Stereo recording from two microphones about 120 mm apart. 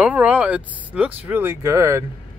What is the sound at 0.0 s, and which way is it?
Speech, 10° right (ahead or behind).